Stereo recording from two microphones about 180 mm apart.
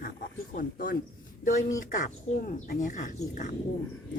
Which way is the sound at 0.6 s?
55° left (ahead or behind).